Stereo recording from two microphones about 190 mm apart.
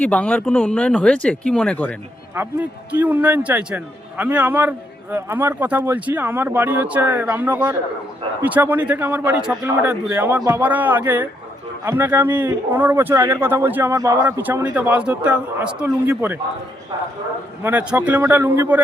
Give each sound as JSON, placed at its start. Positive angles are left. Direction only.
{"t": 0.0, "sound": "speech", "side_deg": 5}
{"t": 2.3, "sound": "speech", "side_deg": -10}
{"t": 17.6, "sound": "speech", "side_deg": -10}